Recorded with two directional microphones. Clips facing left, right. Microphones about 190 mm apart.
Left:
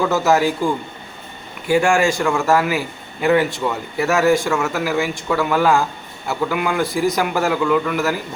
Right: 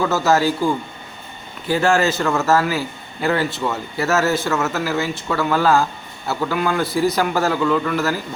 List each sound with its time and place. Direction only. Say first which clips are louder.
0.1 s a man's voice: left 1 dB; 15° left (ahead or behind)